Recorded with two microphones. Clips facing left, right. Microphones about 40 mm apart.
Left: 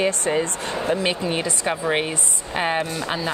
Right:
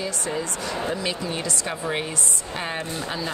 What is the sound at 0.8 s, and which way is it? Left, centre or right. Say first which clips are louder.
Speech: left 7 dB; left.